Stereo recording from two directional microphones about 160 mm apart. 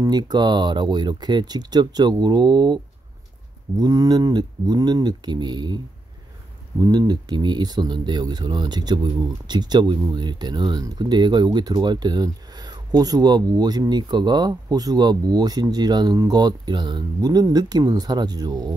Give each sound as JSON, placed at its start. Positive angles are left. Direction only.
{"t": 0.0, "sound": "speech", "side_deg": -25}
{"t": 6.8, "sound": "speech", "side_deg": -25}